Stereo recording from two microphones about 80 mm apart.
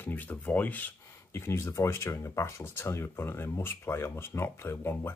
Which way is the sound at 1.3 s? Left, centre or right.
Left.